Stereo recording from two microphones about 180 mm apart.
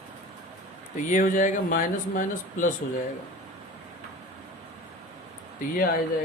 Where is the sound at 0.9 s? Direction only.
45° left (ahead or behind).